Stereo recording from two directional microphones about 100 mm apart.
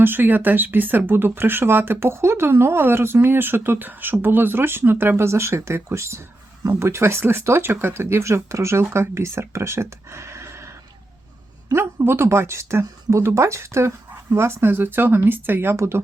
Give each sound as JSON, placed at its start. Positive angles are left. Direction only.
{"t": 0.0, "sound": "speech", "side_deg": -20}